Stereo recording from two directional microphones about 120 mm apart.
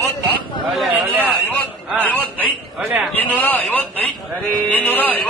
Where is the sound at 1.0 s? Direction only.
15° right (ahead or behind).